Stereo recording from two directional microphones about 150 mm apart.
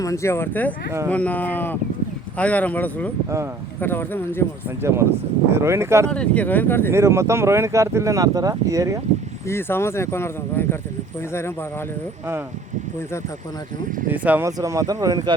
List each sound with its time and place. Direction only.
0.0 s speech: 20° left (ahead or behind)
4.8 s speech: 20° right (ahead or behind)
6.1 s speech: 10° left (ahead or behind)
6.9 s speech: 20° right (ahead or behind)
9.5 s speech: 15° left (ahead or behind)
14.1 s speech: 10° right (ahead or behind)